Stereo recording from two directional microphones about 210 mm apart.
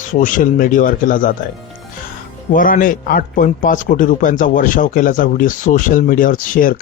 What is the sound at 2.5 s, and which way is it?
Speech, 40° left (ahead or behind).